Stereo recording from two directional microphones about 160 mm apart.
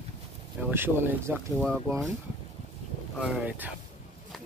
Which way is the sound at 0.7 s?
15° right (ahead or behind).